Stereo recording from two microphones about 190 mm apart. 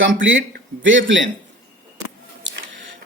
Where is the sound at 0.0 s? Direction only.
90° right.